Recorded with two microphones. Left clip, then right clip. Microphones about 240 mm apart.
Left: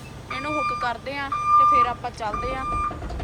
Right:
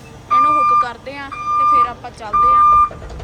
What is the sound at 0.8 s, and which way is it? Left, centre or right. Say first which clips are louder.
Speech: right 6 dB; centre.